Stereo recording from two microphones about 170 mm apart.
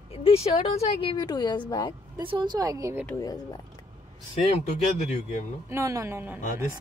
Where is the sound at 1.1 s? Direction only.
25° left (ahead or behind).